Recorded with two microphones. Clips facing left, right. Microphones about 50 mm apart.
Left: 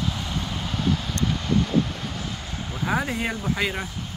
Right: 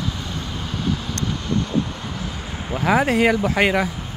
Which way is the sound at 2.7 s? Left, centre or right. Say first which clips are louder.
Right 8 dB; right.